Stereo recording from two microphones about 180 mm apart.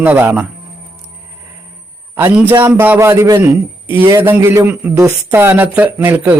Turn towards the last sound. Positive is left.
turn(degrees=-10)  # may be behind; listen again after turning